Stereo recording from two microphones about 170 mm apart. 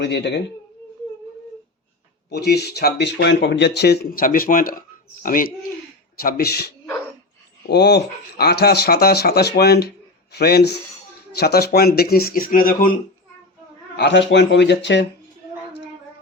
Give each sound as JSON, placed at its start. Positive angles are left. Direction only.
{"t": 0.0, "sound": "speech", "side_deg": 90}
{"t": 2.3, "sound": "speech", "side_deg": 75}
{"t": 13.9, "sound": "speech", "side_deg": 85}